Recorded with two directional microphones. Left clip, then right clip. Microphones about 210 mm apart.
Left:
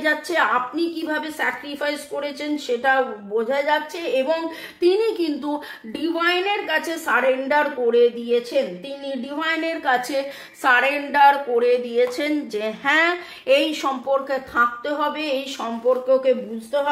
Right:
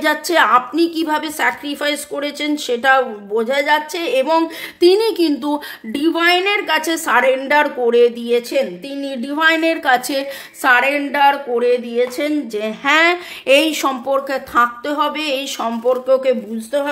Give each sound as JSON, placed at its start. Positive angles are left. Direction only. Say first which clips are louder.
{"t": 0.0, "sound": "a woman's voice", "louder": "right 6 dB", "side_deg": -45}